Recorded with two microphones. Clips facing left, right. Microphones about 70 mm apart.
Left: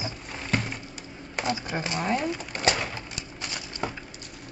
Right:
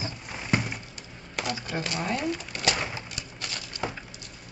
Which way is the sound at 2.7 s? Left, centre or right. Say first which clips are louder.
Left 1 dB; centre.